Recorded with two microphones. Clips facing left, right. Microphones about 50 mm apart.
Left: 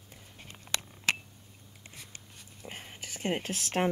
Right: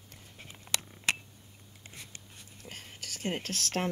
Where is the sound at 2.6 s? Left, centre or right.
Left.